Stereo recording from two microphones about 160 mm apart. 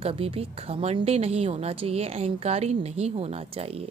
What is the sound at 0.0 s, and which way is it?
Speech, 35° right (ahead or behind).